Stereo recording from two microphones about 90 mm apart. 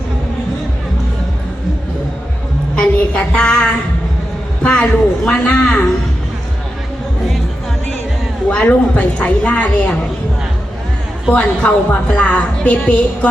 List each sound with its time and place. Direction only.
2.7 s a sound: 15° left (ahead or behind)
4.6 s a woman's voice: 10° left (ahead or behind)
8.4 s a woman's voice: 15° left (ahead or behind)
11.3 s a woman's voice: 15° left (ahead or behind)